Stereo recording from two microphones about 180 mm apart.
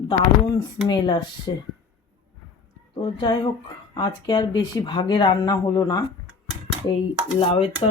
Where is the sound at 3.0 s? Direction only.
25° left (ahead or behind).